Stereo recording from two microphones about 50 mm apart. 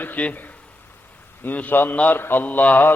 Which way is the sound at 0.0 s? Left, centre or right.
Left.